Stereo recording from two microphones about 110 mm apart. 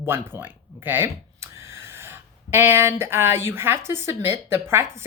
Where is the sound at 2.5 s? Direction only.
20° right (ahead or behind).